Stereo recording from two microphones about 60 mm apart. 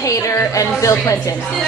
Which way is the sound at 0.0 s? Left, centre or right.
Left.